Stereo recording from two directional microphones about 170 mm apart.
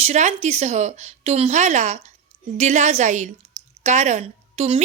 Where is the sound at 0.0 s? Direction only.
40° right (ahead or behind).